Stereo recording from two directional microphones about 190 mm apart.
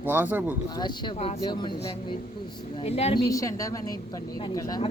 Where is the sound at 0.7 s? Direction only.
25° left (ahead or behind).